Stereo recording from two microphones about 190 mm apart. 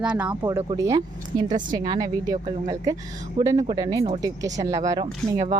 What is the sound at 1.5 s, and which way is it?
Speech, 40° right (ahead or behind).